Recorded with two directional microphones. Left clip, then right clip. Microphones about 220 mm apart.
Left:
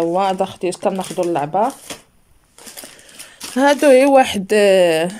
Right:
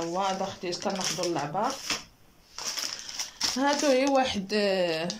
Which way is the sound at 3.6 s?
45° left (ahead or behind).